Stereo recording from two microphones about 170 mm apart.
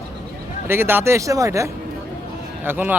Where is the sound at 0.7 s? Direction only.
15° right (ahead or behind).